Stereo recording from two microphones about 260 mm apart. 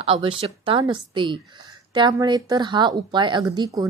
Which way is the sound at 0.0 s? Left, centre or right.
Centre.